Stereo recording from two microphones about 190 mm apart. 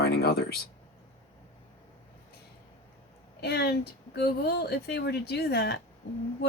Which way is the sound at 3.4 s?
60° left (ahead or behind).